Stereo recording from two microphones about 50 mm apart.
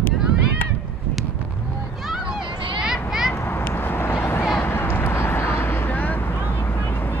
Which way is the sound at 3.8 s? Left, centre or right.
Left.